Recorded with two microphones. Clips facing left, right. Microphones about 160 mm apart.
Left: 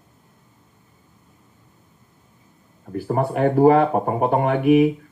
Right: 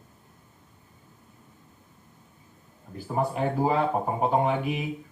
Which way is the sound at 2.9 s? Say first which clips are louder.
Left 6 dB; 65° left (ahead or behind).